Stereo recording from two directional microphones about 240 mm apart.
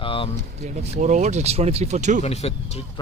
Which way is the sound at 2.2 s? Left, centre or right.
Left.